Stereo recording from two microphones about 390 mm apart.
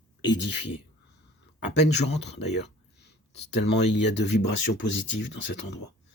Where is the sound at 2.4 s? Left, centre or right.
Left.